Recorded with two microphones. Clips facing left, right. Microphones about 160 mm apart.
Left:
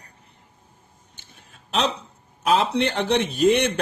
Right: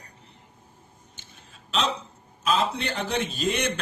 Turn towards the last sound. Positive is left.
turn(degrees=60)  # may be behind; listen again after turning